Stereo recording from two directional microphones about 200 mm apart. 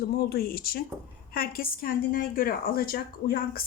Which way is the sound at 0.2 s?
50° left (ahead or behind).